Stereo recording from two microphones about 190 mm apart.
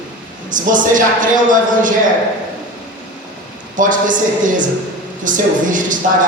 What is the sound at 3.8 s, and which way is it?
A man's voice, 45° right (ahead or behind).